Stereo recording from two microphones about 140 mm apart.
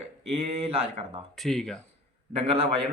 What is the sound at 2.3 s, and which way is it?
Speech, 45° right (ahead or behind).